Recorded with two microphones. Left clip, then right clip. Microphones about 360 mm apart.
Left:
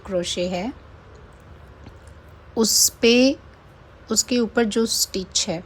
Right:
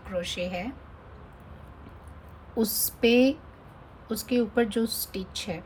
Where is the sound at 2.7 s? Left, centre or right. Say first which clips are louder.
Left 7 dB; centre.